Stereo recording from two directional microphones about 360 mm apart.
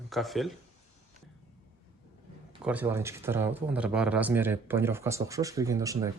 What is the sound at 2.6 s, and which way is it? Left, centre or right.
Speech, centre.